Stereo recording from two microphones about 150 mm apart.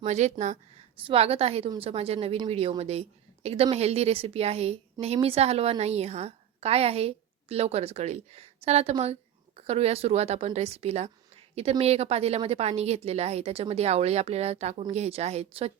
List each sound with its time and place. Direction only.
0.0 s speech: 50° right (ahead or behind)
1.0 s a woman's voice: 40° right (ahead or behind)